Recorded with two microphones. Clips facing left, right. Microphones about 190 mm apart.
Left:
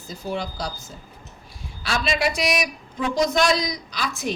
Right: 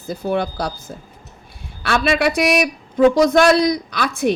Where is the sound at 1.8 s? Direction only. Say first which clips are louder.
Right 6 dB; 60° right (ahead or behind).